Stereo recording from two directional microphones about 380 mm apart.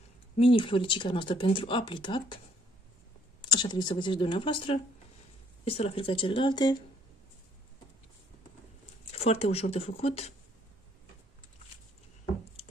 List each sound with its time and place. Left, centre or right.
0.4 s speech: centre
9.1 s speech: centre